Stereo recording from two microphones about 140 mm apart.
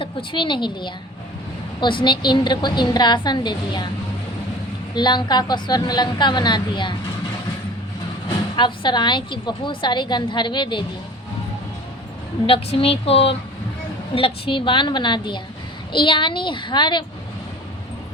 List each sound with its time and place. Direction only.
0.0 s a woman's voice: 35° left (ahead or behind)
4.9 s a woman's voice: 30° left (ahead or behind)
8.5 s a woman's voice: 35° left (ahead or behind)
12.5 s a woman's voice: 40° left (ahead or behind)